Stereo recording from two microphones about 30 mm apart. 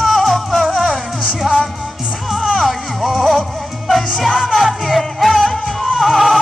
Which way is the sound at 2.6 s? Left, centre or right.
Centre.